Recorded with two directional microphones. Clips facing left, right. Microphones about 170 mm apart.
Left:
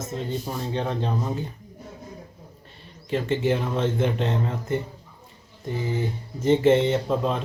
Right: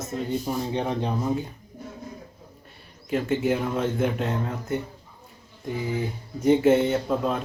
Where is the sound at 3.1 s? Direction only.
10° right (ahead or behind).